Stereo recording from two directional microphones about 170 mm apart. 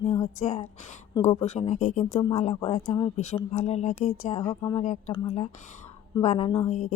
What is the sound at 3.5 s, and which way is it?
Speech, 40° left (ahead or behind).